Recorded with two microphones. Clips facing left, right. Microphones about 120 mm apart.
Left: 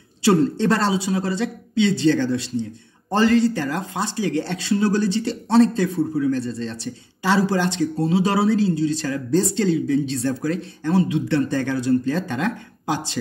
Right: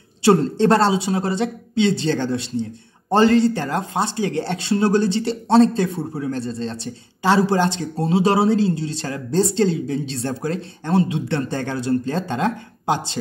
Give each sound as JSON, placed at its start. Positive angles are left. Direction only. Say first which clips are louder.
{"t": 0.2, "sound": "speech", "louder": "right 2 dB", "side_deg": -25}